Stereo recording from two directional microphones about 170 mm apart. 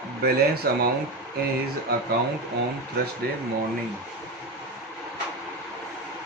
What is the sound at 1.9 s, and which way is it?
Speech, 75° right (ahead or behind).